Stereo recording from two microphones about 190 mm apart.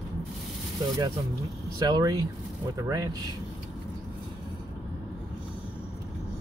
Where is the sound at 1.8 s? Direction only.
20° right (ahead or behind).